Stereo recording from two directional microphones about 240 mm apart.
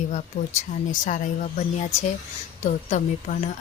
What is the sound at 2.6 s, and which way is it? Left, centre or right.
Speech, left.